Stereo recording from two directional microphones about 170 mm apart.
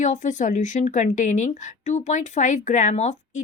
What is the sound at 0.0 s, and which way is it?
A woman's voice, 45° left (ahead or behind).